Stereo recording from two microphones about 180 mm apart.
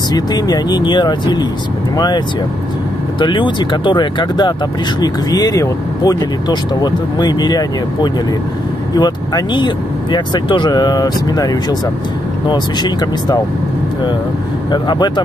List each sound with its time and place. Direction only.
0.1 s speech: 20° left (ahead or behind)
14.7 s speech: 25° left (ahead or behind)